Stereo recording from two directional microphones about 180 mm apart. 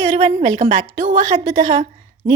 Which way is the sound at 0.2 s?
35° right (ahead or behind).